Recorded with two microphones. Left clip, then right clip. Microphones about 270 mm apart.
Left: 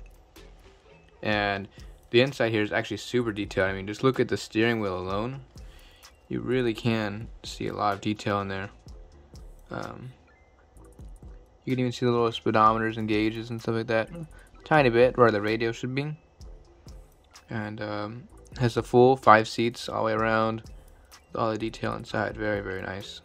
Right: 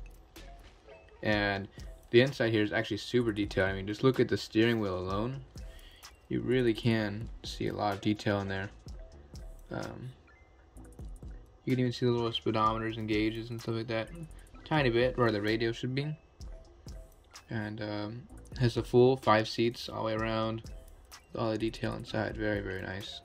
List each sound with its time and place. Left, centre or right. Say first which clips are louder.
1.2 s speech: left 4 dB; centre
11.6 s speech: left 4 dB; centre